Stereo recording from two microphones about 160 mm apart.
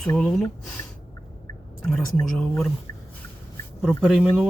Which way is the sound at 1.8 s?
5° left (ahead or behind).